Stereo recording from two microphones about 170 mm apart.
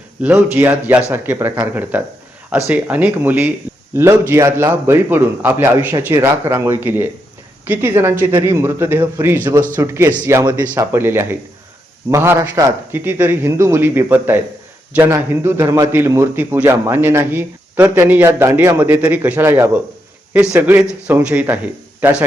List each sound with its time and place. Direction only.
0.2 s a man's voice: 10° right (ahead or behind)